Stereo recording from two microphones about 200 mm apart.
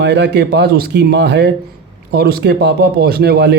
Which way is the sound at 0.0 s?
60° right (ahead or behind).